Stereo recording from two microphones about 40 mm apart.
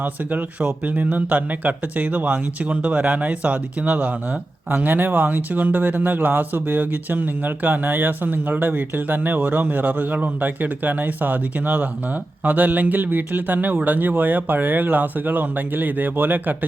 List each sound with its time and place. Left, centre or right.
0.0 s speech: right
3.9 s speech: right